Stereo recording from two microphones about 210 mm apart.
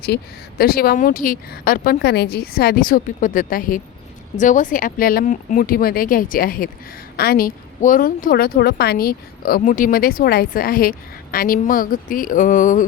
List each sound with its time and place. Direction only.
0.6 s a woman's voice: 45° left (ahead or behind)